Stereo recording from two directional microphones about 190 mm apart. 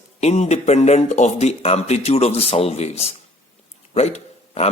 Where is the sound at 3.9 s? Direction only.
35° left (ahead or behind).